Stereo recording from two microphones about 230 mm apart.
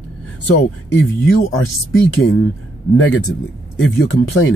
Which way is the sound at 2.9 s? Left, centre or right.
Left.